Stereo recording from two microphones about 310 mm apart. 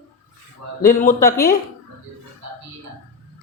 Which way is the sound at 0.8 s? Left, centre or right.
Left.